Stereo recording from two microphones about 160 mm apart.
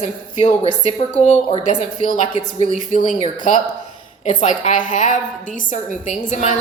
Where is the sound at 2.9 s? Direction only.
50° left (ahead or behind).